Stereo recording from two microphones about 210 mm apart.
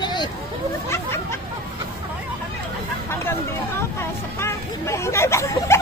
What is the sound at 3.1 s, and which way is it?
Speech, 10° left (ahead or behind).